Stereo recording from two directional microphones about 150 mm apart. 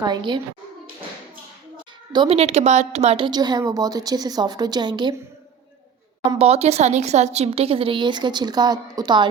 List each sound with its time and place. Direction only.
0.0 s a woman's voice: 30° right (ahead or behind)
2.1 s speech: 40° right (ahead or behind)
3.2 s a woman's voice: 30° right (ahead or behind)
6.4 s a woman's voice: 45° right (ahead or behind); by 9.2 s 25° right (ahead or behind)